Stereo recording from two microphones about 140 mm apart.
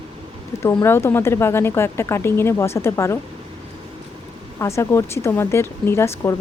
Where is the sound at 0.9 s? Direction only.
15° left (ahead or behind).